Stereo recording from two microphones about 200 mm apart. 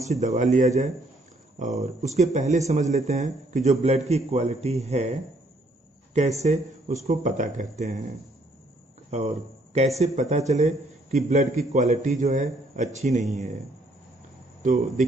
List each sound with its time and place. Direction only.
0.0 s speech: 35° right (ahead or behind)
6.4 s speech: 35° right (ahead or behind)
9.1 s speech: 35° right (ahead or behind)
14.6 s speech: 40° right (ahead or behind)